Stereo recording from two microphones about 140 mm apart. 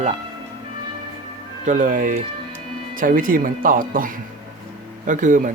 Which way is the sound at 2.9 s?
80° right.